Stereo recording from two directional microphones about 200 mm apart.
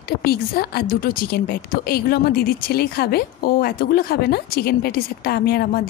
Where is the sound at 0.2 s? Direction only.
50° left (ahead or behind).